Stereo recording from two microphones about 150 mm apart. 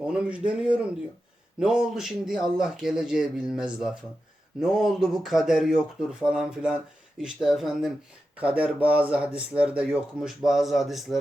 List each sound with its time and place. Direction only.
0.1 s speech: 5° right (ahead or behind)